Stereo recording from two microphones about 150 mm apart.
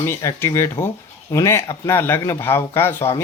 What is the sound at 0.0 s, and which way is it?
Speech, 20° left (ahead or behind).